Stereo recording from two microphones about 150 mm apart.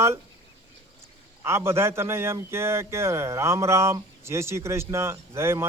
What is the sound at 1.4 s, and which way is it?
Speech, 15° right (ahead or behind).